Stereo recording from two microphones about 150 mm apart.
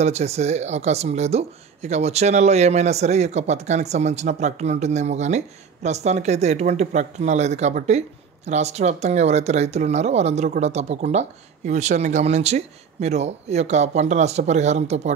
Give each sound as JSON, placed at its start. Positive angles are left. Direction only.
{"t": 0.0, "sound": "speech", "side_deg": -45}